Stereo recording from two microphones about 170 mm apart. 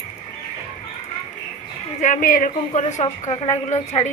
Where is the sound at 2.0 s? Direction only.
50° left (ahead or behind).